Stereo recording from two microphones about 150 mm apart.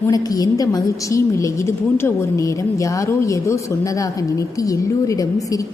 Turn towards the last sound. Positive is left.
turn(degrees=20)  # may be behind; listen again after turning